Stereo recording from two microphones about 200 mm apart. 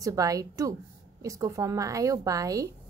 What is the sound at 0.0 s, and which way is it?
A woman's voice, 15° right (ahead or behind).